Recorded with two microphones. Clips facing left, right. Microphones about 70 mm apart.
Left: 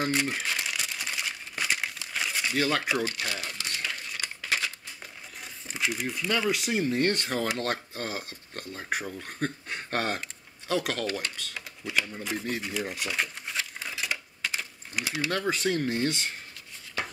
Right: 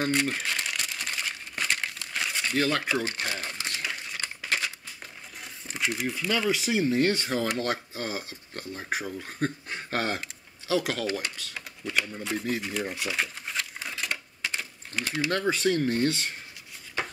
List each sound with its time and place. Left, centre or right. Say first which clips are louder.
0.0 s crumpling: right 1 dB; centre
3.1 s crumpling: right 1 dB; right
3.7 s a sound: right 1 dB; centre
4.2 s crumpling: even; centre
5.4 s speech: even; centre
11.2 s a sound: even; centre
15.0 s speech: right 2 dB; centre